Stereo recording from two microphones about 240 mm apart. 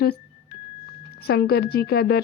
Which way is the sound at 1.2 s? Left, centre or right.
Left.